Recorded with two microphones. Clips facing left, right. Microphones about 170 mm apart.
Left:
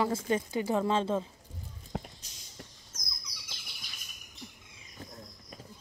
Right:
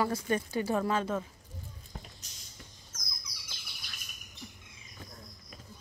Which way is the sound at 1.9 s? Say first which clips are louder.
Left 10 dB; 90° left.